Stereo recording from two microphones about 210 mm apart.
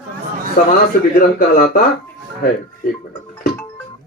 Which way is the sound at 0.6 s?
40° left (ahead or behind).